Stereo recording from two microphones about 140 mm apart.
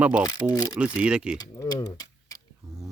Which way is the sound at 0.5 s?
25° left (ahead or behind).